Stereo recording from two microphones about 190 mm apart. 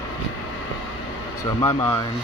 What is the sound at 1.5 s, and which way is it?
Speech, 15° left (ahead or behind).